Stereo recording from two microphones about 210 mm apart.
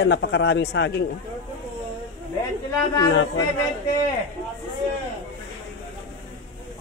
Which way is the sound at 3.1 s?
60° left (ahead or behind).